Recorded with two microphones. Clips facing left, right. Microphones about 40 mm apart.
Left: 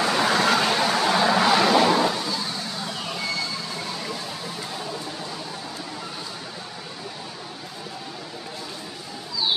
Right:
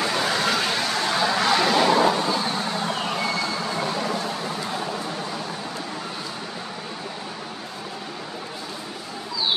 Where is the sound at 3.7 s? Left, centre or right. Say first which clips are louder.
Right 6 dB; right.